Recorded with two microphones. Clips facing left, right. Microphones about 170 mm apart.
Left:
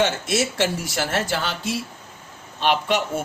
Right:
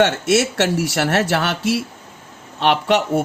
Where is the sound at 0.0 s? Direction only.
70° right (ahead or behind).